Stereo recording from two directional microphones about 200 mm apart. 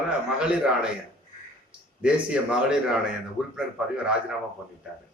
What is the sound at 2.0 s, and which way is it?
A man's voice, 5° right (ahead or behind).